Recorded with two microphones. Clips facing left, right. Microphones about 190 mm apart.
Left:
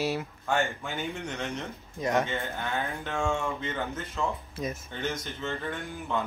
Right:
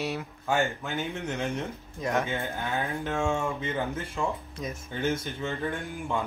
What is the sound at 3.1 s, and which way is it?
Speech, 5° right (ahead or behind).